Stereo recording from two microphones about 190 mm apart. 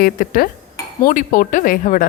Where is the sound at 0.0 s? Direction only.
50° left (ahead or behind).